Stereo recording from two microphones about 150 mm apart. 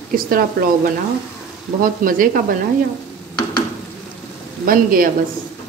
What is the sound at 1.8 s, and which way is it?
Speech, 65° right (ahead or behind).